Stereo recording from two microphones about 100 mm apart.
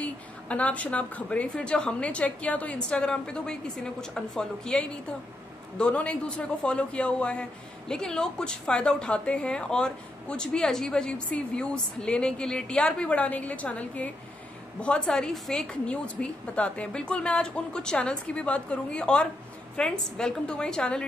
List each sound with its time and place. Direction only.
0.0 s a woman's voice: 15° left (ahead or behind)